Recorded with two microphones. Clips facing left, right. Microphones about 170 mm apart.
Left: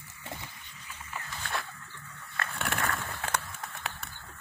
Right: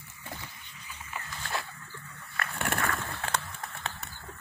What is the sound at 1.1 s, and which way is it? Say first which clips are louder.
Dog: right 1 dB; centre (ahead or behind).